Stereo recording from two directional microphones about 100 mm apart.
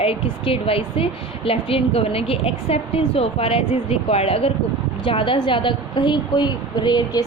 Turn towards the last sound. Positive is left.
turn(degrees=45)  # may be behind; listen again after turning